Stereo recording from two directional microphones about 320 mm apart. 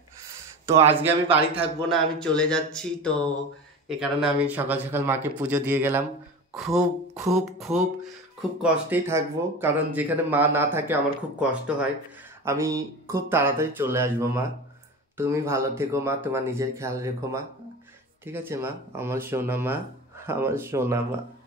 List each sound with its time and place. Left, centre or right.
0.7 s speech: centre
1.9 s a sound: centre
12.4 s speech: centre